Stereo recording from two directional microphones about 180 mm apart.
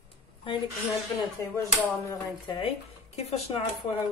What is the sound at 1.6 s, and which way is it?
A woman's voice, 20° left (ahead or behind).